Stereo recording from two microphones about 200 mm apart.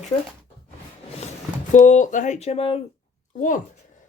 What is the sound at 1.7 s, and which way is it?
Speech, 40° left (ahead or behind).